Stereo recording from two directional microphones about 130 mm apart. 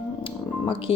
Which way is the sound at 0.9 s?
45° left (ahead or behind).